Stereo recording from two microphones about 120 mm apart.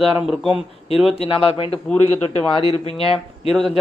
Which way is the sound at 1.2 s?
50° left (ahead or behind).